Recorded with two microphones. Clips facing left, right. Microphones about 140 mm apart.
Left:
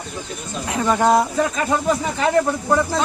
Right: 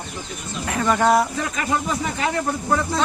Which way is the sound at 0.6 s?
15° left (ahead or behind).